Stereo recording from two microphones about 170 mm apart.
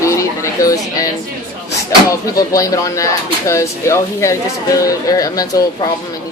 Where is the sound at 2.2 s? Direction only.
20° left (ahead or behind).